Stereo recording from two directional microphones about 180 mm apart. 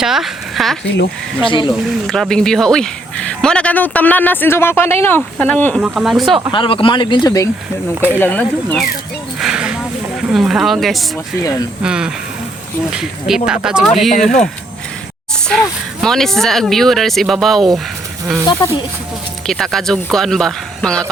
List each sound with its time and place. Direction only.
0.0 s speech: centre (ahead or behind)
1.4 s speech: 30° left (ahead or behind)
2.0 s speech: 5° left (ahead or behind)
5.8 s speech: 5° right (ahead or behind)
6.5 s speech: 30° left (ahead or behind); by 8.9 s 5° left (ahead or behind)
9.4 s a sound: 5° right (ahead or behind)
11.8 s speech: 5° right (ahead or behind)
15.4 s speech: centre (ahead or behind)
18.4 s speech: 25° left (ahead or behind)
19.5 s speech: centre (ahead or behind)